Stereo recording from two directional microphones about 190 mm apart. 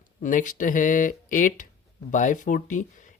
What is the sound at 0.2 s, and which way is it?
Speech, 40° left (ahead or behind).